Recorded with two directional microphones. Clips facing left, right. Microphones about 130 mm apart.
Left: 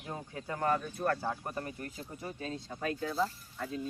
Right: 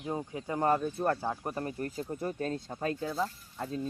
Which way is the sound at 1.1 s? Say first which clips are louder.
Right 2 dB; 20° right (ahead or behind).